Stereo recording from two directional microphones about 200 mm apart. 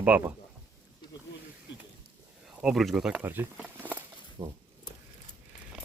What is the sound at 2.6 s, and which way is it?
Speech, centre (ahead or behind).